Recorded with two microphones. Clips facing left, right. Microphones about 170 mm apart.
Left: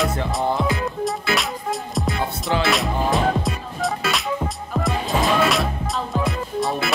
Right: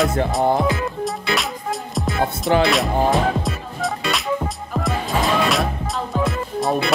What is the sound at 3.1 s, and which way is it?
Music, centre (ahead or behind).